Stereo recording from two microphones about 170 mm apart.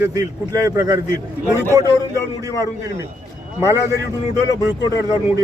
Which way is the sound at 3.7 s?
20° right (ahead or behind).